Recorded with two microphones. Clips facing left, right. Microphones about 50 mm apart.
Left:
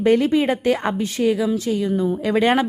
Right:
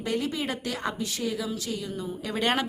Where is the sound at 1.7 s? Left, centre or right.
Left.